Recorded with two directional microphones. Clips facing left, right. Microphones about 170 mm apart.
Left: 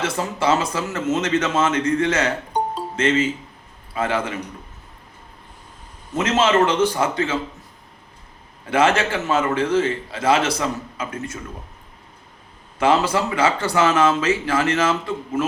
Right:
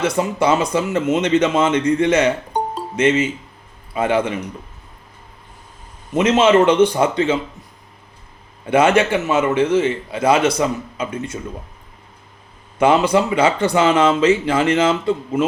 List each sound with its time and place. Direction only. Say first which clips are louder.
0.2 s speech: right 2 dB; 20° right (ahead or behind)
3.9 s speech: right 5 dB; 20° right (ahead or behind)
6.1 s speech: right 5 dB; 20° right (ahead or behind)
8.7 s speech: right 4 dB; 20° right (ahead or behind)
12.8 s speech: right 4 dB; 20° right (ahead or behind)